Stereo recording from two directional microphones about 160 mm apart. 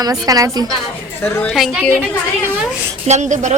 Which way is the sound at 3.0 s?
45° right (ahead or behind).